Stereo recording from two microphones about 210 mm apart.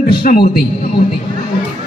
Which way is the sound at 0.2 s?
45° left (ahead or behind).